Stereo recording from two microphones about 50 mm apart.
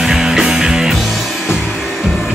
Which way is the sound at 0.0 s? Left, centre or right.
Centre.